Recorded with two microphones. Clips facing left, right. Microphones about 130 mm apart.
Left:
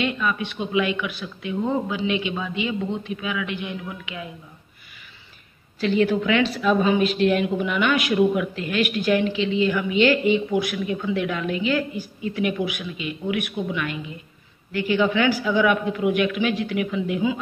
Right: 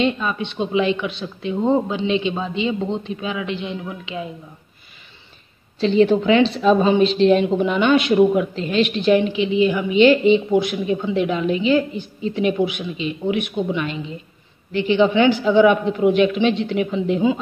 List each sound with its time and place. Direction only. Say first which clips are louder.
0.0 s speech: right 4 dB; 25° right (ahead or behind)
5.8 s speech: right 5 dB; 25° right (ahead or behind)